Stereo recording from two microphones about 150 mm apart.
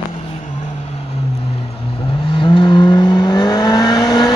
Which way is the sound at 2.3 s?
35° left (ahead or behind).